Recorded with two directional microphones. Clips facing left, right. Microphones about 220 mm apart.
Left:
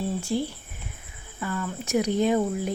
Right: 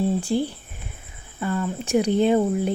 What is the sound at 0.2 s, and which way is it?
Speech, 30° right (ahead or behind).